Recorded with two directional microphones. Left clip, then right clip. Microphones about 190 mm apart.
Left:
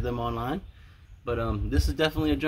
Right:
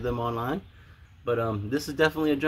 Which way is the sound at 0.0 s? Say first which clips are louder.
Right 2 dB; 15° left (ahead or behind).